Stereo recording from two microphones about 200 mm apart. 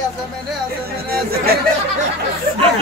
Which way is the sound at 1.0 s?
50° right (ahead or behind).